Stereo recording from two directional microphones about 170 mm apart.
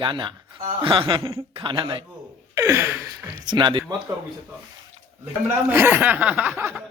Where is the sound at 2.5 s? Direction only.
15° right (ahead or behind).